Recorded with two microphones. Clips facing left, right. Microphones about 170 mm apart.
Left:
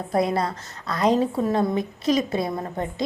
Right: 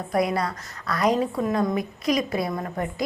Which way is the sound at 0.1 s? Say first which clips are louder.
Left 1 dB; 25° left (ahead or behind).